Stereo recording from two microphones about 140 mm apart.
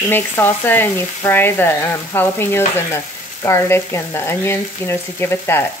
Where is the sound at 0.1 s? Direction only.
15° left (ahead or behind).